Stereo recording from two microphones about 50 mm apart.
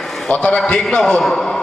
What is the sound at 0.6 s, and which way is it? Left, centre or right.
Speech, centre.